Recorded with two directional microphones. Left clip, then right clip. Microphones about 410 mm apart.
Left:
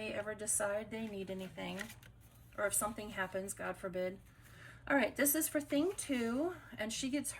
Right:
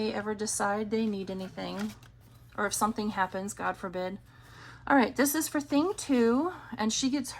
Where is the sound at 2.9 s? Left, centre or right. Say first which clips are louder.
Right 9 dB; centre.